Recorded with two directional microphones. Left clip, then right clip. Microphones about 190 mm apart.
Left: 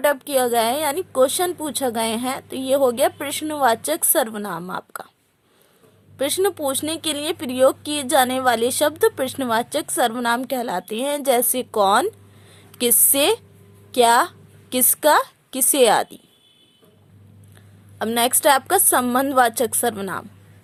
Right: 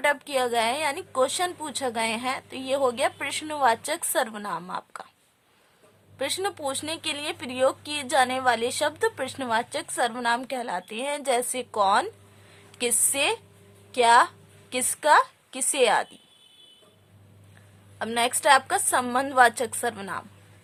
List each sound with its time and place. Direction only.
0.0 s speech: 25° left (ahead or behind)
6.1 s a woman's voice: 25° left (ahead or behind)
18.0 s speech: 30° left (ahead or behind)